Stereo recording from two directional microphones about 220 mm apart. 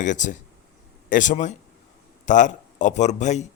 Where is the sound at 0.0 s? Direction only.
35° left (ahead or behind).